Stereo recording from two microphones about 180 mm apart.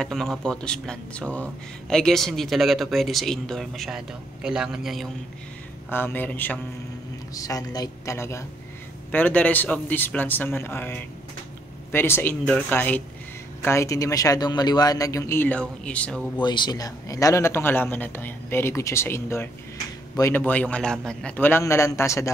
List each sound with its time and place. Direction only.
0.0 s speech: centre (ahead or behind)
5.9 s a man's voice: 10° left (ahead or behind)
16.3 s a man's voice: 25° left (ahead or behind)